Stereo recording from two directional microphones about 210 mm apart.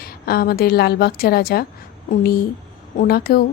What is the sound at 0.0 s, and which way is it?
A woman's voice, 45° left (ahead or behind).